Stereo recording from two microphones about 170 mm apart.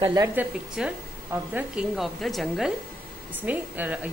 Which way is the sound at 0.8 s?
5° right (ahead or behind).